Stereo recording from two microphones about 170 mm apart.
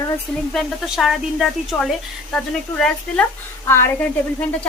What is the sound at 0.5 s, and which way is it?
A woman's voice, centre (ahead or behind).